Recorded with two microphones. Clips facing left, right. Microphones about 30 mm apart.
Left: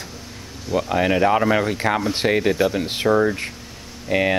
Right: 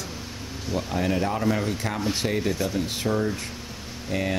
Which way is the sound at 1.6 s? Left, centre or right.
Left.